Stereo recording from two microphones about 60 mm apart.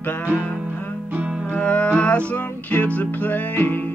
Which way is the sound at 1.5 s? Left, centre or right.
Centre.